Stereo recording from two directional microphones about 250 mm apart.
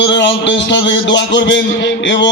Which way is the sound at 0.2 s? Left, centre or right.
Left.